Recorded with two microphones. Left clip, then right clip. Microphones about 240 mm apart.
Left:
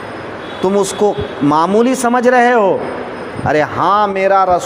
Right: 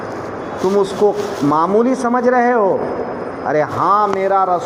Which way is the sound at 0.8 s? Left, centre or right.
Left.